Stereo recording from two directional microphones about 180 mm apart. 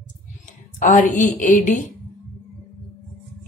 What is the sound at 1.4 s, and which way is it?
Speech, 45° left (ahead or behind).